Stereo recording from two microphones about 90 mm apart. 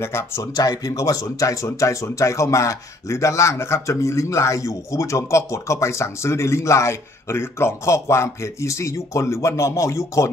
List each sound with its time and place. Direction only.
0.0 s speech: 30° left (ahead or behind)
0.6 s speech: 40° left (ahead or behind)